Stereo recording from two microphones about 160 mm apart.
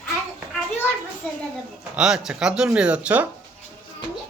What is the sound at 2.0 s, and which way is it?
Music, 5° right (ahead or behind).